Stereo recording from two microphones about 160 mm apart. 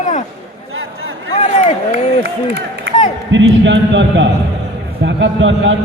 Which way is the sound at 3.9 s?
90° right.